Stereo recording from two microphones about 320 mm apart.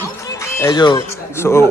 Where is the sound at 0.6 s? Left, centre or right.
Centre.